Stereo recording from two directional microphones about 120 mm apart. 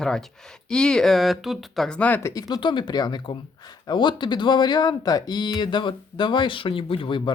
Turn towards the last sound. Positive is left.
turn(degrees=45)  # may be behind; listen again after turning